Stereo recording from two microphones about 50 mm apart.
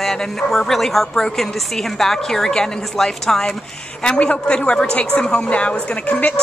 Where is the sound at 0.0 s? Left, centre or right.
Centre.